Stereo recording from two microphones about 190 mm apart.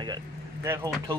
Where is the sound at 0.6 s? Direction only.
15° right (ahead or behind).